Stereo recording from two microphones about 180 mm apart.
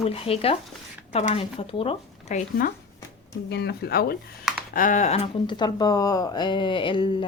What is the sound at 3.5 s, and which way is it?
Speech, 65° left (ahead or behind).